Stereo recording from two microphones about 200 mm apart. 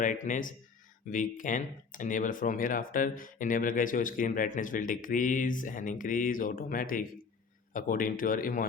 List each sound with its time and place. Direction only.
0.0 s speech: 40° left (ahead or behind)